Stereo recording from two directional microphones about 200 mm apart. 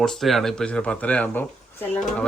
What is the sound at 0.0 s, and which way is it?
Speech, centre (ahead or behind).